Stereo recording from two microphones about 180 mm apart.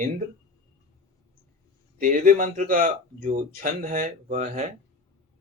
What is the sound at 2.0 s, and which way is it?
Speech, 45° right (ahead or behind).